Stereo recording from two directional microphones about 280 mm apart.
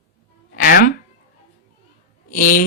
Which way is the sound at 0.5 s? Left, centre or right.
Left.